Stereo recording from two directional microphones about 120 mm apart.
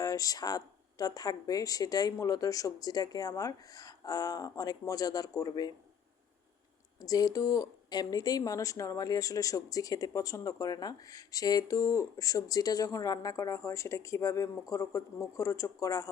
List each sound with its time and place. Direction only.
0.0 s speech: 30° left (ahead or behind)
7.0 s a woman's voice: 30° left (ahead or behind)